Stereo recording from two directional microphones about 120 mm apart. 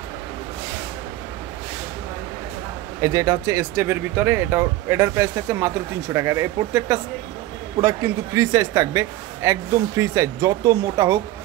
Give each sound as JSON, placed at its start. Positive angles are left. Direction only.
{"t": 3.0, "sound": "speech", "side_deg": -25}